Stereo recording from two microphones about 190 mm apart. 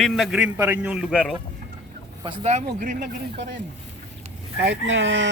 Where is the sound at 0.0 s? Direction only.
Centre (ahead or behind).